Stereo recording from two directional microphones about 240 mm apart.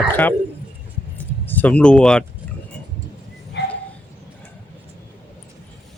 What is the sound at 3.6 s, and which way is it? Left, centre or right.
Dog, left.